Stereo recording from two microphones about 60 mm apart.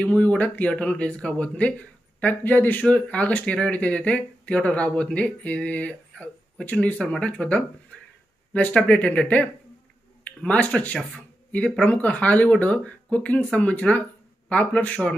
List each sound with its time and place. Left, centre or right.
0.0 s speech: left